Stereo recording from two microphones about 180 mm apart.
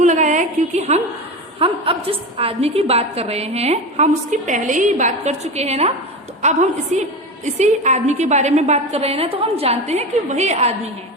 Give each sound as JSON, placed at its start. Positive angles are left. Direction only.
{"t": 0.0, "sound": "a woman's voice", "side_deg": -45}